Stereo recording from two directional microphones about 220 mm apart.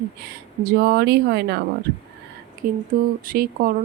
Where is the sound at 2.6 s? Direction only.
40° right (ahead or behind).